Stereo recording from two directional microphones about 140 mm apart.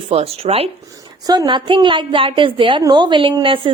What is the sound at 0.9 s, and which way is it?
Speech, 25° right (ahead or behind).